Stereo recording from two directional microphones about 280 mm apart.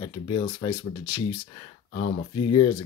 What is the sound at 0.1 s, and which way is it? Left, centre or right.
Speech, centre.